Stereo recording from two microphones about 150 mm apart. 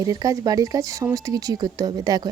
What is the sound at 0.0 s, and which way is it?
A woman's voice, 25° right (ahead or behind).